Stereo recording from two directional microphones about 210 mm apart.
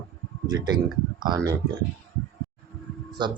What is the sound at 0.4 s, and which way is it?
Speech, 20° right (ahead or behind).